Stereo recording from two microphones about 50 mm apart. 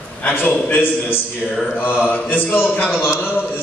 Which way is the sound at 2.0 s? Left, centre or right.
Left.